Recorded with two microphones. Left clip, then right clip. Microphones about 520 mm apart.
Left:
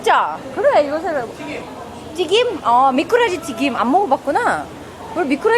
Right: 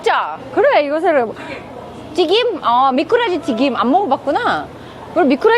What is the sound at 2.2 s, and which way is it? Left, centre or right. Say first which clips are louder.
A woman's voice: right 2 dB; right.